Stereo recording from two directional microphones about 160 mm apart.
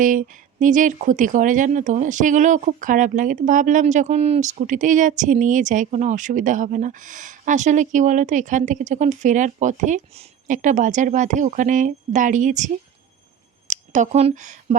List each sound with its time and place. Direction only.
0.0 s speech: 55° right (ahead or behind)